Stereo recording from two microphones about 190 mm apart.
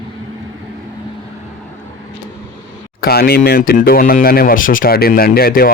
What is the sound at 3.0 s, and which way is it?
Speech, 55° left (ahead or behind).